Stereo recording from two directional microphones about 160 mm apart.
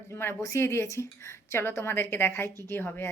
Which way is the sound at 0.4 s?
15° left (ahead or behind).